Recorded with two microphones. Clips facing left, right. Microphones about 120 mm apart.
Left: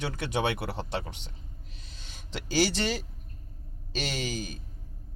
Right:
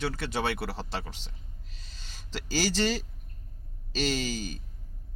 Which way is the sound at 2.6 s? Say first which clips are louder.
Left 1 dB; 15° left (ahead or behind).